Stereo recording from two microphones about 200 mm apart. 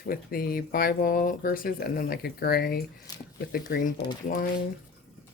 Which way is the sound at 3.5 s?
50° left (ahead or behind).